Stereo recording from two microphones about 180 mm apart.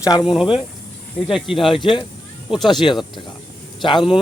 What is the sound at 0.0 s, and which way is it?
Speech, 20° left (ahead or behind).